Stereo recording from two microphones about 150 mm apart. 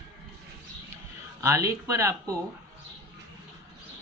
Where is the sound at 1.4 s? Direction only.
20° right (ahead or behind).